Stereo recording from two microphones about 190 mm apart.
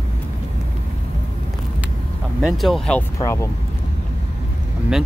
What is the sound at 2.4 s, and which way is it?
Speech, centre (ahead or behind).